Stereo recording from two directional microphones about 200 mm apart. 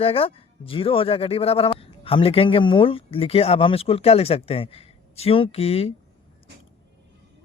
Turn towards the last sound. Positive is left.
turn(degrees=30)  # may be behind; listen again after turning